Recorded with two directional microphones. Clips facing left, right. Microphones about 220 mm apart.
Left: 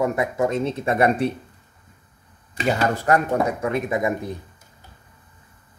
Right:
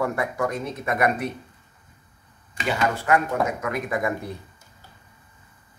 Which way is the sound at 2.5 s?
35° left (ahead or behind).